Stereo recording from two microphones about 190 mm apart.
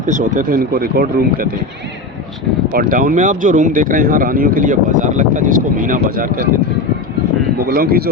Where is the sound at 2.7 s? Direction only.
50° right (ahead or behind).